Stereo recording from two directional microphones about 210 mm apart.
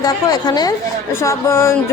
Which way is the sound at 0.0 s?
20° left (ahead or behind).